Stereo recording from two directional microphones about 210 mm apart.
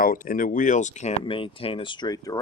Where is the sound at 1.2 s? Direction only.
25° left (ahead or behind).